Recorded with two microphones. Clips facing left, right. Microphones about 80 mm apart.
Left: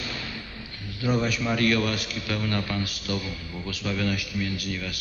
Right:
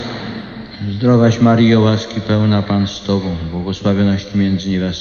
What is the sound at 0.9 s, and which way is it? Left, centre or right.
A man's voice, right.